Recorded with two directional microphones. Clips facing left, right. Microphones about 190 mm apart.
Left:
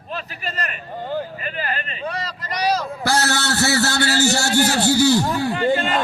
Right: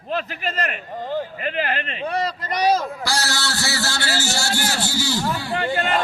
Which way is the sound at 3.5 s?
40° left (ahead or behind).